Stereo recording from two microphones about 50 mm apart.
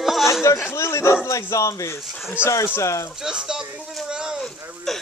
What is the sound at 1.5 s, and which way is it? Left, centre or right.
Speech, left.